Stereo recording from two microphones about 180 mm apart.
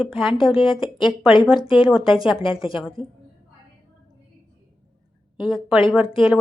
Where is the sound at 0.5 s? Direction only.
30° left (ahead or behind).